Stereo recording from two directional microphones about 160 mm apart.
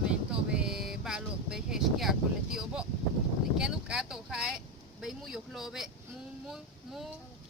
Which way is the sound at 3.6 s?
5° right (ahead or behind).